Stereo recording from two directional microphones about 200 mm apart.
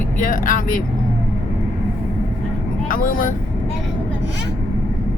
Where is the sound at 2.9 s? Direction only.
45° left (ahead or behind).